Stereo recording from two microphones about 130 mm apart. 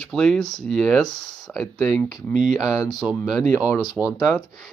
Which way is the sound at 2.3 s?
75° right (ahead or behind).